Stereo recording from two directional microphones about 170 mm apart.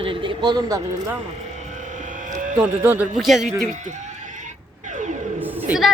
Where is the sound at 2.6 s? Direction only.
10° right (ahead or behind).